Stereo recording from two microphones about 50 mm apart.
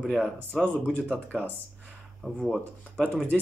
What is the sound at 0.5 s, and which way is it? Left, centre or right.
Speech, centre.